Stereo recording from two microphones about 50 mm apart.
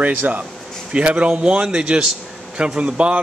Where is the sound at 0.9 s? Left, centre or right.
Right.